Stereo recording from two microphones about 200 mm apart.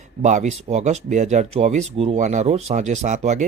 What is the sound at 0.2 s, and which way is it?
Speech, 35° right (ahead or behind).